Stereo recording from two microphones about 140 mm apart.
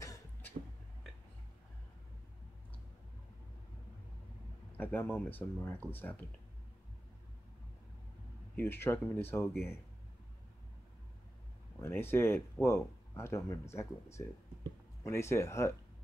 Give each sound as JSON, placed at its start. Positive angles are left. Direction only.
{"t": 4.7, "sound": "speech", "side_deg": 15}
{"t": 8.5, "sound": "speech", "side_deg": 15}
{"t": 11.8, "sound": "speech", "side_deg": 15}